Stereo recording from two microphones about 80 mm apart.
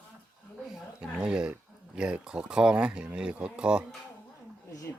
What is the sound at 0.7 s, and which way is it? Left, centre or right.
Speech, centre.